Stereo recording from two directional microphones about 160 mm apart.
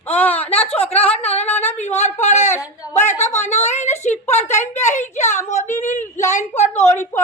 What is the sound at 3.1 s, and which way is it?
Speech, 15° left (ahead or behind).